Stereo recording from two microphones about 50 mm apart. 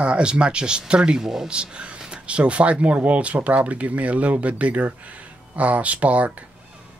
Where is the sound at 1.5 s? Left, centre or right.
Right.